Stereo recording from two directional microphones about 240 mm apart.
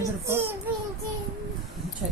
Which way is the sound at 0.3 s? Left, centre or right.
Centre.